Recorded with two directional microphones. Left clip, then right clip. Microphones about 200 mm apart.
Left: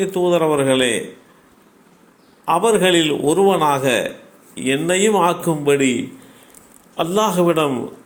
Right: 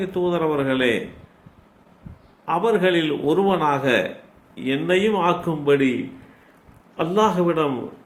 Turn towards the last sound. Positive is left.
turn(degrees=30)  # may be behind; listen again after turning